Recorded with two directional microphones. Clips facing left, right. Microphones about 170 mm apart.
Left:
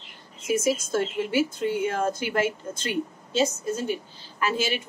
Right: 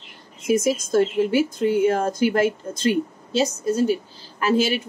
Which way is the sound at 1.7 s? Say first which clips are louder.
Right 6 dB; 40° right (ahead or behind).